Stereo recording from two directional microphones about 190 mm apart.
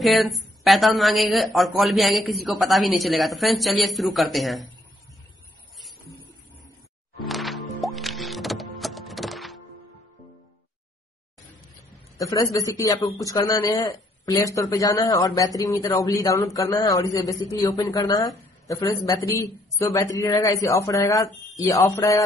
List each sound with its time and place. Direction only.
0.0 s a woman's voice: centre (ahead or behind)
7.2 s music: centre (ahead or behind)
12.2 s speech: 20° left (ahead or behind)